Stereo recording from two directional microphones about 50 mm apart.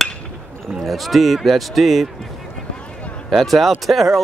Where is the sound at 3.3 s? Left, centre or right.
Centre.